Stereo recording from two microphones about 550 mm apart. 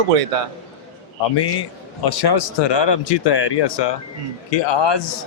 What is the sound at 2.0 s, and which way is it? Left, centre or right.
A man's voice, left.